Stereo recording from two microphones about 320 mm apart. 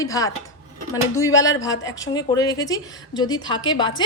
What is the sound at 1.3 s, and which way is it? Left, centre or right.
Speech, left.